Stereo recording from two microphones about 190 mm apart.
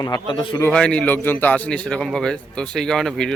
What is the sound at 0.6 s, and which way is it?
Speech, 5° left (ahead or behind).